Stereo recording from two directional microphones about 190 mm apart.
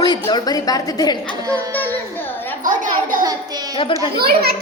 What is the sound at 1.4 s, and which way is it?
Child singing, 20° right (ahead or behind).